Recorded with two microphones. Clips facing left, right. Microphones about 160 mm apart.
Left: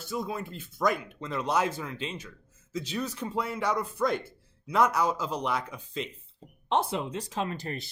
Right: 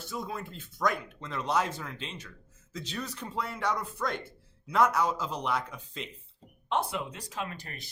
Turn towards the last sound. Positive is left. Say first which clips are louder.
# left 6 dB
turn(degrees=30)  # may be behind; listen again after turning